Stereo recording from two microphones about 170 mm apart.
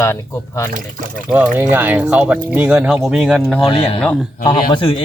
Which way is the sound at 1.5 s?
10° right (ahead or behind).